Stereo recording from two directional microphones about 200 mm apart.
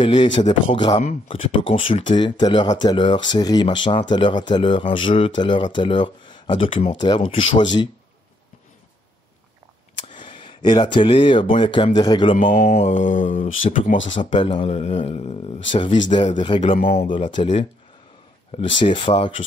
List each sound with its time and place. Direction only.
0.0 s speech: 25° left (ahead or behind)
0.4 s mantra: 35° left (ahead or behind)
1.7 s speech: 30° left (ahead or behind)
10.0 s a sound: 25° left (ahead or behind)
11.5 s speech: 25° left (ahead or behind)
12.4 s mantra: 40° left (ahead or behind)
12.7 s mantra: 30° left (ahead or behind)
14.3 s speech: 25° left (ahead or behind)